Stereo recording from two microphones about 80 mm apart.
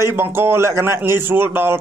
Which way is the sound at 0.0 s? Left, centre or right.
Right.